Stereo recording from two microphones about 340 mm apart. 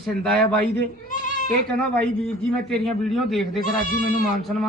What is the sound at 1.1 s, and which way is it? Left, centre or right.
Goat, left.